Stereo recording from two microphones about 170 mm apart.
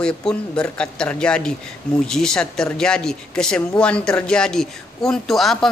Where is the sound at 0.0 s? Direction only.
5° left (ahead or behind).